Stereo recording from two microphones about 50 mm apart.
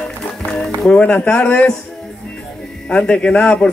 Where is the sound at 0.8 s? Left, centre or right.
Left.